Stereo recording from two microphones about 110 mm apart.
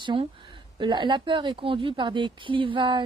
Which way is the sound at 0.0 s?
50° right (ahead or behind).